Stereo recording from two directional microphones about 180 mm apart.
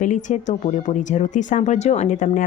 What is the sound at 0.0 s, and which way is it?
Speech, 45° left (ahead or behind).